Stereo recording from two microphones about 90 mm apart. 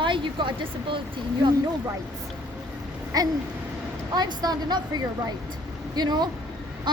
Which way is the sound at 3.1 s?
45° right (ahead or behind).